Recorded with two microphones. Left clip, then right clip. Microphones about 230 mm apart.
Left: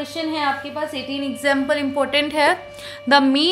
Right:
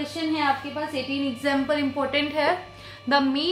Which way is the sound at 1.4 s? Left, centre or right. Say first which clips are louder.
Left 6 dB; left.